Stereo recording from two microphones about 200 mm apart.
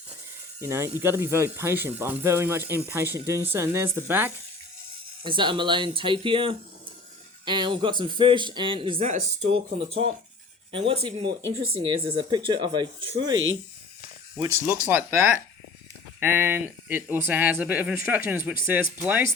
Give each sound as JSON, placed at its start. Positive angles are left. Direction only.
{"t": 0.6, "sound": "speech", "side_deg": -10}
{"t": 5.2, "sound": "a man's voice", "side_deg": -25}
{"t": 10.7, "sound": "a man's voice", "side_deg": -25}